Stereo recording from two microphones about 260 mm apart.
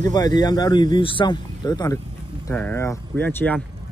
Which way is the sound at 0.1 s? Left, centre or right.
Centre.